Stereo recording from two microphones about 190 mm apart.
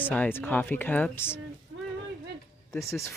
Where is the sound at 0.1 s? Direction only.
10° left (ahead or behind).